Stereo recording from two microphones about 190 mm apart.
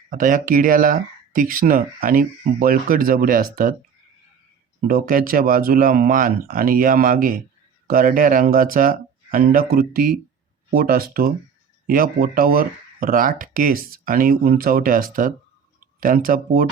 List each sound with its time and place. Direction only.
0.1 s speech: 45° right (ahead or behind)
4.9 s speech: 50° right (ahead or behind)